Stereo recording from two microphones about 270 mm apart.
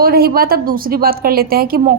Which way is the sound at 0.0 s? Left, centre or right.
Right.